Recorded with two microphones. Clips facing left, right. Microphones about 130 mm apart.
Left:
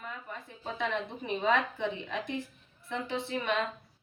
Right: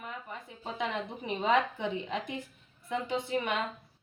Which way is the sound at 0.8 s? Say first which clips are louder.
Left 1 dB; 15° right (ahead or behind).